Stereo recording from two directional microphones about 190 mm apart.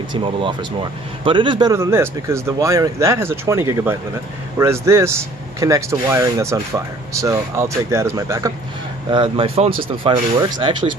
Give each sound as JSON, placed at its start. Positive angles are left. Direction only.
{"t": 0.1, "sound": "speech", "side_deg": -25}